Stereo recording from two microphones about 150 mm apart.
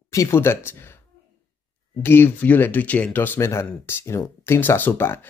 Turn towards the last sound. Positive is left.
turn(degrees=15)  # may be behind; listen again after turning